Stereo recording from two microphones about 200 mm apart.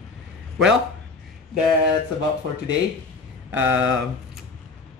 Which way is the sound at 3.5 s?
10° right (ahead or behind).